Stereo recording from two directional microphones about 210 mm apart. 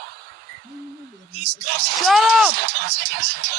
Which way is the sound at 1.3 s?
50° right (ahead or behind).